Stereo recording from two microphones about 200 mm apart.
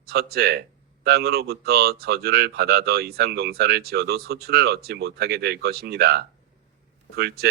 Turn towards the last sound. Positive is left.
turn(degrees=-50)  # may be behind; listen again after turning